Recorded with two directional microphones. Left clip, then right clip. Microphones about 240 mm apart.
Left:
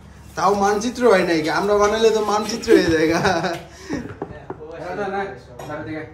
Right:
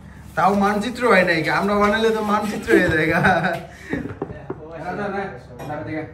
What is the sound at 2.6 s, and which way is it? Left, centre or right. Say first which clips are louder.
Speech: left 2 dB; centre.